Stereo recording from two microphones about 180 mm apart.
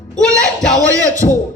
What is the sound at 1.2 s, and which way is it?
Speech, 40° left (ahead or behind).